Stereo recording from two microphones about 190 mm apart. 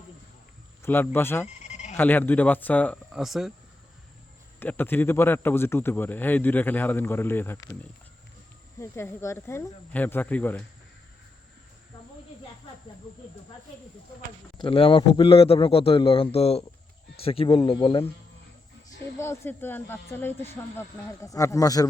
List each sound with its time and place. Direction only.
0.8 s speech: 10° left (ahead or behind)
1.5 s a sound: 35° left (ahead or behind)
2.0 s speech: 10° left (ahead or behind)
4.6 s speech: 10° left (ahead or behind)
8.8 s speech: 15° left (ahead or behind)
14.6 s a man's voice: 30° left (ahead or behind)
19.2 s speech: 15° left (ahead or behind)